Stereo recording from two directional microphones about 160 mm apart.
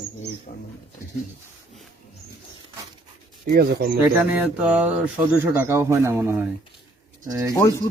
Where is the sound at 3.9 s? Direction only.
10° right (ahead or behind).